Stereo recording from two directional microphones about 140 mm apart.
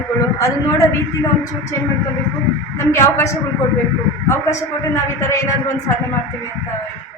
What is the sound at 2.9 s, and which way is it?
Speech, 20° left (ahead or behind).